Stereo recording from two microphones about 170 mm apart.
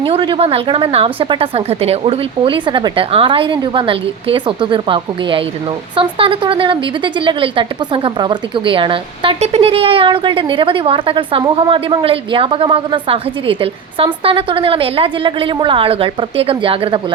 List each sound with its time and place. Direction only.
0.0 s a woman's voice: 30° right (ahead or behind)